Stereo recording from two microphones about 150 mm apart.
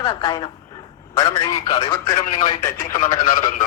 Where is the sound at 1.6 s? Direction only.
35° left (ahead or behind).